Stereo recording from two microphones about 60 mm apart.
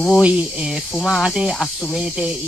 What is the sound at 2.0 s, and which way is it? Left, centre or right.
Cricket, centre.